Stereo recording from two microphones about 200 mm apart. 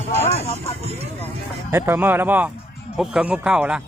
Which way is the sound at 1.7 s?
10° right (ahead or behind).